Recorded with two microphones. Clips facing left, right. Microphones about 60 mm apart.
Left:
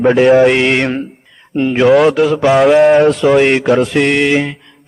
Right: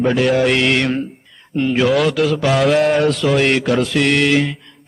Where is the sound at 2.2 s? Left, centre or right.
Centre.